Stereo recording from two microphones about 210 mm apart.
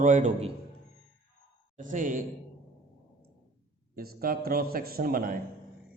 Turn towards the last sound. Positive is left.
turn(degrees=-45)  # may be behind; listen again after turning